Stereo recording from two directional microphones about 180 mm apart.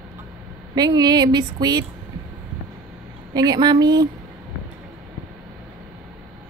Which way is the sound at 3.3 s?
20° right (ahead or behind).